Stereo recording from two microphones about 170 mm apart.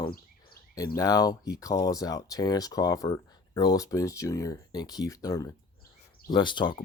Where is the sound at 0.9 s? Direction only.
20° left (ahead or behind).